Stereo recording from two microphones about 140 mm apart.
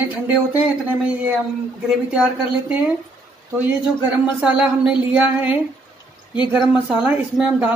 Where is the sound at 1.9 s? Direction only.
5° right (ahead or behind).